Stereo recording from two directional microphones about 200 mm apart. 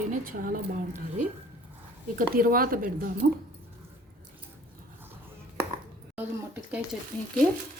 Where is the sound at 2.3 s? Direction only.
45° right (ahead or behind).